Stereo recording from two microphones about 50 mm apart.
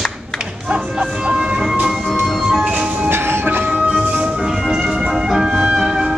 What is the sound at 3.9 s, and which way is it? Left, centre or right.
Music, centre.